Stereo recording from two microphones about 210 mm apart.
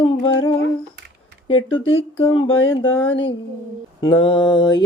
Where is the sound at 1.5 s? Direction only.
70° left (ahead or behind).